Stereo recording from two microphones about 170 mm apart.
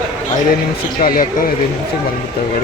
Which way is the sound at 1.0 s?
55° left (ahead or behind).